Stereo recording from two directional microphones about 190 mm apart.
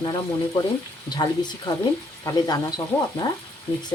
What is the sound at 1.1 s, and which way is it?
Speech, 20° left (ahead or behind).